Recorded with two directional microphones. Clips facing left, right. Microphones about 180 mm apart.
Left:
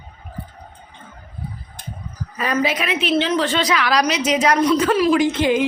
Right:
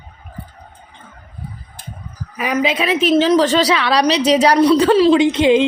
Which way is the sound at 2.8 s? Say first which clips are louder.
Right 6 dB; 40° right (ahead or behind).